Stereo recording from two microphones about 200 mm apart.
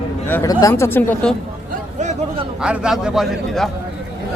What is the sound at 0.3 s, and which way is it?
Speech, 15° left (ahead or behind).